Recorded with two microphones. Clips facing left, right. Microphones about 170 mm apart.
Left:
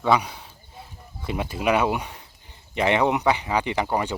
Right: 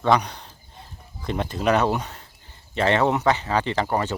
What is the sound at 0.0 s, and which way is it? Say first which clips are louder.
Speech: right 1 dB; 5° left (ahead or behind).